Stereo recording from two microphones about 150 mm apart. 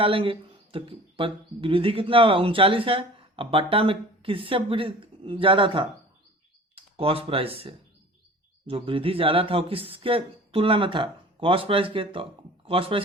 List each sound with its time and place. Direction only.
0.0 s speech: 35° right (ahead or behind)